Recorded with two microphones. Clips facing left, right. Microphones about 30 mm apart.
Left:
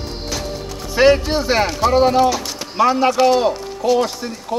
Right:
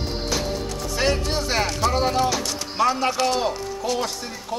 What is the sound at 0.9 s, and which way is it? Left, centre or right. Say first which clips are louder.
A man's voice: left 10 dB; left.